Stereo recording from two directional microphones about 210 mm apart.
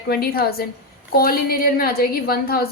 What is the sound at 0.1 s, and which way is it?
A woman's voice, 45° left (ahead or behind).